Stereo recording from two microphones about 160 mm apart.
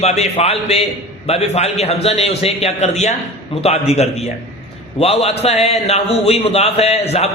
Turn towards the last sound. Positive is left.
turn(degrees=40)  # may be behind; listen again after turning